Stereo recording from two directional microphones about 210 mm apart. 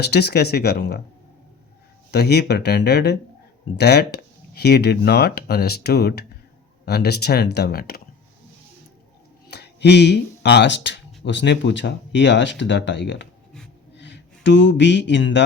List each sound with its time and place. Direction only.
0.0 s speech: 50° left (ahead or behind)
2.0 s speech: 50° left (ahead or behind)
9.5 s speech: 55° left (ahead or behind)